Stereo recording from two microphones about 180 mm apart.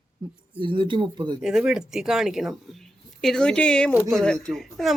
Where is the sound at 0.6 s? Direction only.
25° right (ahead or behind).